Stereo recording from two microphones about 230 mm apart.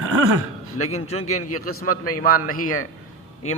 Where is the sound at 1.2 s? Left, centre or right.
Left.